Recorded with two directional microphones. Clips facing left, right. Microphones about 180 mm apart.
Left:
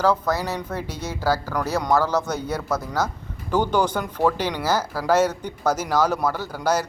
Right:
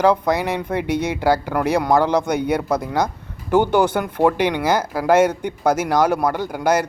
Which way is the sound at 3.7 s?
10° right (ahead or behind).